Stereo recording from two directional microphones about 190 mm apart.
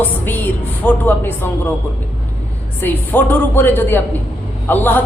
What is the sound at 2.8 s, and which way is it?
A woman's voice, 10° left (ahead or behind).